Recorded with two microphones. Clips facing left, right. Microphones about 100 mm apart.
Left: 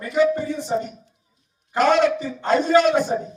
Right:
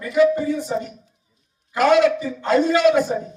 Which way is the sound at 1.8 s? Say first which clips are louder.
Right 2 dB; centre (ahead or behind).